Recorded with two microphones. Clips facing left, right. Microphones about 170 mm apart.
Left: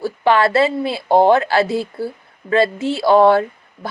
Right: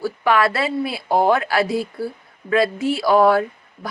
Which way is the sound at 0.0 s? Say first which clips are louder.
Left 3 dB; 25° left (ahead or behind).